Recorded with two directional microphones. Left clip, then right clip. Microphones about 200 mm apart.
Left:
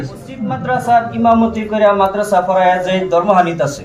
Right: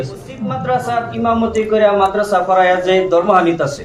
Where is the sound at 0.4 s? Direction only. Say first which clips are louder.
Left 2 dB; 15° right (ahead or behind).